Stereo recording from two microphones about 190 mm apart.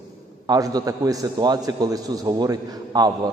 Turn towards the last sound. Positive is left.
turn(degrees=-20)  # may be behind; listen again after turning